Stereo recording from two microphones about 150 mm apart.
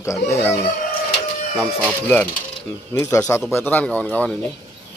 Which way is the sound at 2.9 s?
15° left (ahead or behind).